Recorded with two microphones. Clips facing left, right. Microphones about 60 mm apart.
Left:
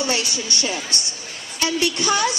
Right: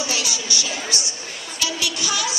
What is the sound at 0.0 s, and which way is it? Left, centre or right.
A woman's voice, left.